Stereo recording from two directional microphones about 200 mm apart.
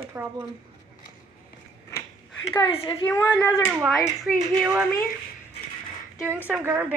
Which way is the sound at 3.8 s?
5° right (ahead or behind).